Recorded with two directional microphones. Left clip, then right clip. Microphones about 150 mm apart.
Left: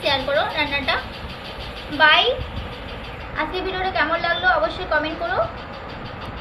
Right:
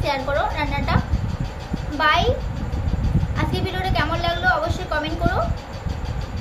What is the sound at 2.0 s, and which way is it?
Speech, 40° right (ahead or behind).